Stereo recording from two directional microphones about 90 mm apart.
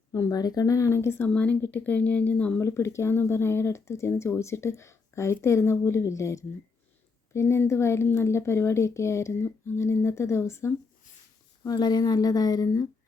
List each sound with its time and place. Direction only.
0.1 s speech: 45° left (ahead or behind)
1.3 s speech: 15° left (ahead or behind)
2.6 s speech: 30° left (ahead or behind)
11.6 s speech: 50° left (ahead or behind)